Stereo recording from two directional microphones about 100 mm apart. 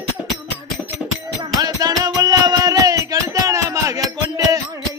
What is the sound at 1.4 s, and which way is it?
Music, 40° right (ahead or behind).